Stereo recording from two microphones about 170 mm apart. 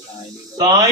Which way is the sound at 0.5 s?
20° right (ahead or behind).